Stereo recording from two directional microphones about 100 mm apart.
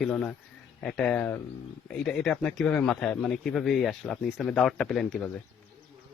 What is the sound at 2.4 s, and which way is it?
Speech, 10° left (ahead or behind).